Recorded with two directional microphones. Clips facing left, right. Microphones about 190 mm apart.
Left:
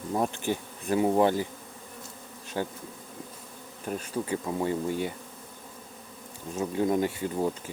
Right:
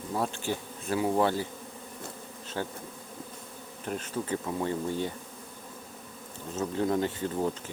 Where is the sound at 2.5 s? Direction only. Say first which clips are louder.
Left 3 dB; 15° left (ahead or behind).